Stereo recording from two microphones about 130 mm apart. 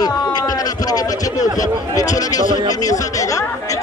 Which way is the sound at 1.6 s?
25° left (ahead or behind).